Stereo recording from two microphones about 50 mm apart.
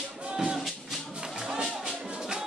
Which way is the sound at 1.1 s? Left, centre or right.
Centre.